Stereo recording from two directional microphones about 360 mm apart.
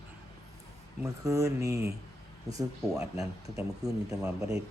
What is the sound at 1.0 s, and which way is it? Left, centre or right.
Speech, centre.